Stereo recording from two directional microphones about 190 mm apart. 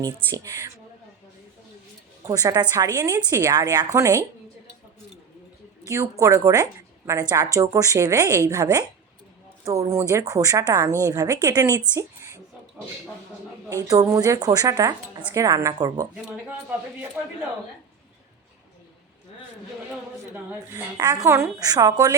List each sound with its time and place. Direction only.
0.0 s speech: 20° right (ahead or behind)
2.2 s a woman's voice: 20° right (ahead or behind)
5.8 s a woman's voice: 15° right (ahead or behind)
13.7 s a woman's voice: 20° right (ahead or behind)
16.1 s a woman's voice: 5° right (ahead or behind)
20.3 s a woman's voice: 10° right (ahead or behind)